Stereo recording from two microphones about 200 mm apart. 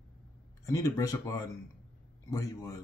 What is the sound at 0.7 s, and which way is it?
Speech, 15° left (ahead or behind).